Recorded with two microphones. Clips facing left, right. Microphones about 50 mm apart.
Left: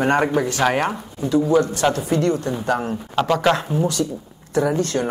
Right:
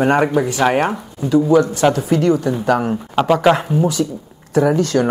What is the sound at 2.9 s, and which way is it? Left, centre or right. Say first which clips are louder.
Speech: right 4 dB; centre.